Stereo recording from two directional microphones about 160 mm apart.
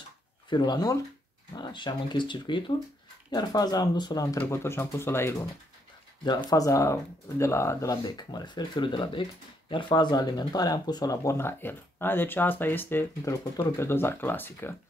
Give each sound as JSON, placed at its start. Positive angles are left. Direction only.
{"t": 0.5, "sound": "speech", "side_deg": 25}